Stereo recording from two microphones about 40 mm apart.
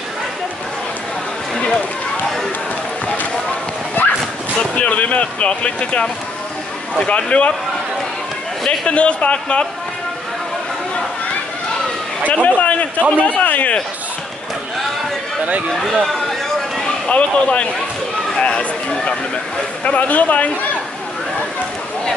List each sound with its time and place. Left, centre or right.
3.9 s dog: left
4.7 s speech: left
7.1 s speech: left
8.6 s a man's voice: left
12.3 s speech: left
15.7 s a sound: centre
17.1 s speech: left
19.8 s speech: left